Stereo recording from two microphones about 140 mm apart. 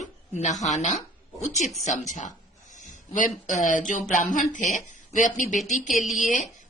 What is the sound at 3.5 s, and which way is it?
Speech, 65° left (ahead or behind).